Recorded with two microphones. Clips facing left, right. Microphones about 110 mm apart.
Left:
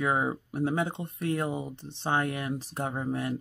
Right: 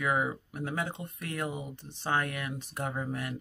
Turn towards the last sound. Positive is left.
turn(degrees=30)  # may be behind; listen again after turning